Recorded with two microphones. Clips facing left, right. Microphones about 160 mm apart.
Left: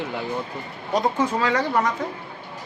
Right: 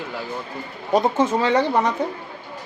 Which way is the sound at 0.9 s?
20° right (ahead or behind).